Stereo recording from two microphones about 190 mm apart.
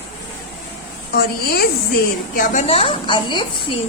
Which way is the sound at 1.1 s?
55° left (ahead or behind).